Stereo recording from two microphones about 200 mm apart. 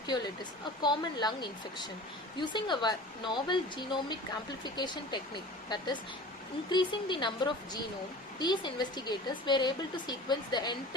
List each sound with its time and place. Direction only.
0.8 s speech: 20° left (ahead or behind)